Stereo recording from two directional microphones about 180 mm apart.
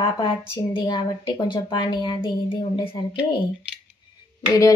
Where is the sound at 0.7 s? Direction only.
25° left (ahead or behind).